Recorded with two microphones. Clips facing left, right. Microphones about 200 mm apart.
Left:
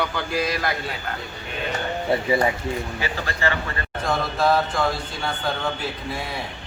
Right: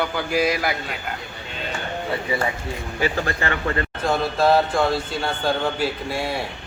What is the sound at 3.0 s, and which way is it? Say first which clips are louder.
Speech: right 4 dB; 50° right (ahead or behind).